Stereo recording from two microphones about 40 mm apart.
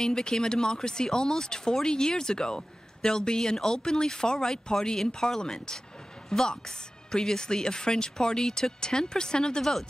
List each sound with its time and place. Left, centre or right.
0.0 s speech: centre